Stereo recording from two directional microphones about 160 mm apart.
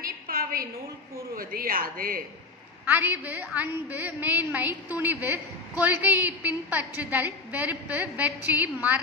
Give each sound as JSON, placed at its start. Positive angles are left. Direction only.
{"t": 0.0, "sound": "a sound", "side_deg": -65}
{"t": 1.3, "sound": "speech", "side_deg": -65}
{"t": 2.8, "sound": "a woman's voice", "side_deg": -10}